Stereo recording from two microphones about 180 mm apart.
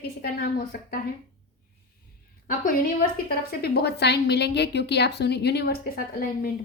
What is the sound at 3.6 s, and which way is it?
A woman's voice, 65° left (ahead or behind).